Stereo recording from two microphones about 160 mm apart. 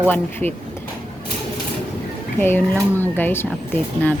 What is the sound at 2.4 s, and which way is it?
Speech, 15° left (ahead or behind).